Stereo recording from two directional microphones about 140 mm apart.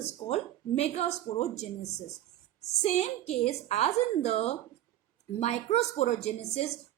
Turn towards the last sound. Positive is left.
turn(degrees=55)  # may be behind; listen again after turning